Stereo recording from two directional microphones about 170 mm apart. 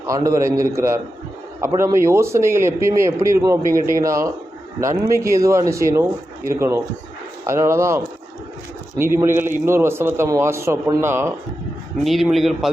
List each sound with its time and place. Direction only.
0.1 s a man's voice: 20° right (ahead or behind)
12.0 s a man's voice: centre (ahead or behind)